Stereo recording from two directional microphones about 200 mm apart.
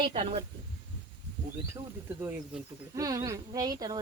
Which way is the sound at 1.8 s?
15° right (ahead or behind).